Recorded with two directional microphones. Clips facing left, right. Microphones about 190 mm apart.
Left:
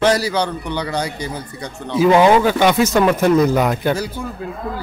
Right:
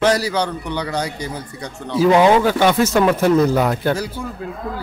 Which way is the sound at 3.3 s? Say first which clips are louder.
Left 1 dB; 15° left (ahead or behind).